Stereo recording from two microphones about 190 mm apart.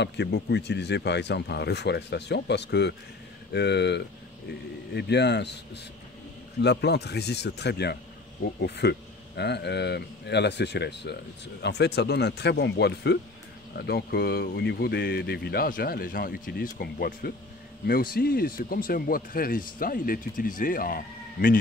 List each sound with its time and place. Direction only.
0.0 s speech: 65° left (ahead or behind)
6.6 s speech: 60° left (ahead or behind)